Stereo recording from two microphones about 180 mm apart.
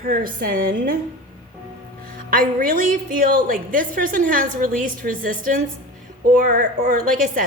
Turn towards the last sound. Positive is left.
turn(degrees=-45)  # may be behind; listen again after turning